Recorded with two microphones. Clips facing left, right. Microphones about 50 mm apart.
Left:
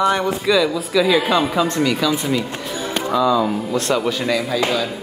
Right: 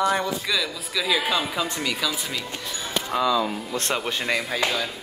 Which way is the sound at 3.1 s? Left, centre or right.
Left.